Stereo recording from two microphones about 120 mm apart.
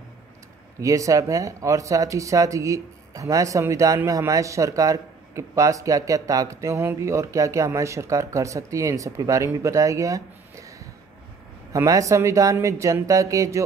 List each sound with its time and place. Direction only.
0.7 s speech: 25° right (ahead or behind)
11.7 s speech: 30° right (ahead or behind)